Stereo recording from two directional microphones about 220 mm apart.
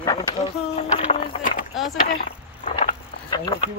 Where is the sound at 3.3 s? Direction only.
20° left (ahead or behind).